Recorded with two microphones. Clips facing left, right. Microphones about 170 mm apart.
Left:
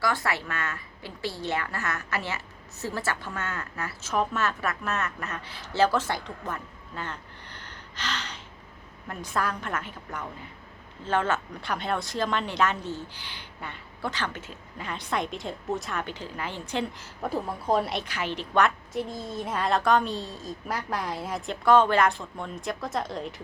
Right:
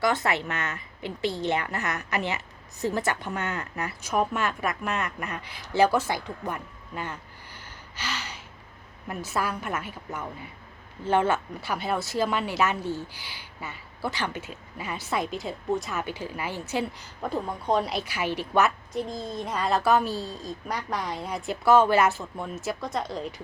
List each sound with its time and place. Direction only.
0.0 s a woman's voice: 20° right (ahead or behind)
17.2 s a woman's voice: 5° left (ahead or behind)